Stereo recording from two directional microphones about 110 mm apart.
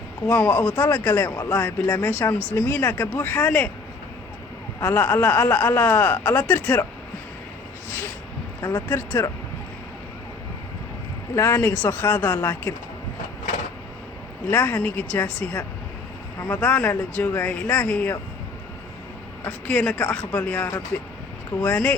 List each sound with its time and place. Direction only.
0.3 s speech: 15° left (ahead or behind)
4.8 s speech: 20° left (ahead or behind)
8.9 s speech: 20° left (ahead or behind)
11.3 s speech: 20° left (ahead or behind)
14.5 s speech: 15° left (ahead or behind)
16.6 s speech: 10° left (ahead or behind)
19.5 s speech: 10° left (ahead or behind)